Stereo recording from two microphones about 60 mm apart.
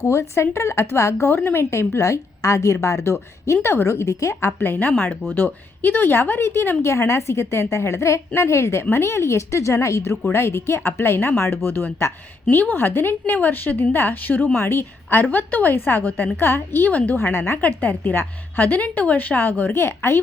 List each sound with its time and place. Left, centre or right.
0.0 s speech: left
4.6 s a woman's voice: left
12.5 s a woman's voice: left
17.3 s speech: left
17.6 s a woman's voice: left